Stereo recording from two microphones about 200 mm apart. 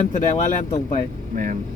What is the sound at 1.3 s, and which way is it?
Speech, 40° right (ahead or behind).